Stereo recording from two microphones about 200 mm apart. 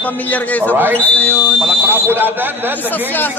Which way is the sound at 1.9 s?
10° right (ahead or behind).